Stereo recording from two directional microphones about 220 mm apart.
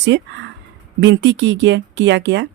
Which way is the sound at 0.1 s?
50° right (ahead or behind).